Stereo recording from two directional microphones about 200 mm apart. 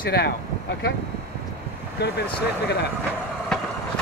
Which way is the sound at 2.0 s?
55° left (ahead or behind).